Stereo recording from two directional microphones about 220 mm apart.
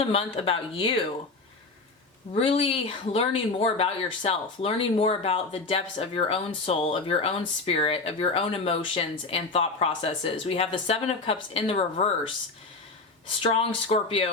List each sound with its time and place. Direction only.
0.0 s speech: 25° left (ahead or behind)
2.3 s speech: 25° left (ahead or behind)
13.4 s speech: 25° left (ahead or behind)